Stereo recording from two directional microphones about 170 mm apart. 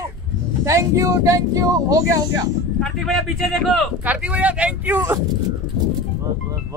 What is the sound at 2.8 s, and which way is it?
Speech, centre (ahead or behind).